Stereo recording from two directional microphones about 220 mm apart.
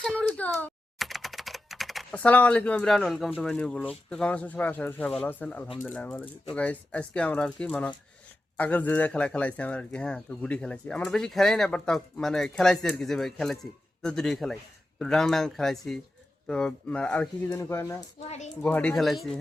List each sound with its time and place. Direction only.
0.2 s speech: 5° left (ahead or behind)
18.3 s a child's voice: 30° left (ahead or behind)
18.6 s speech: 5° left (ahead or behind)